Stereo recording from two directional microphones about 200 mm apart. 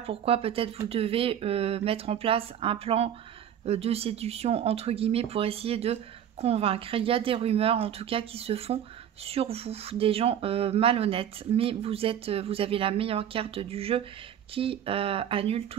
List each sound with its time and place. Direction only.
0.0 s speech: 30° right (ahead or behind)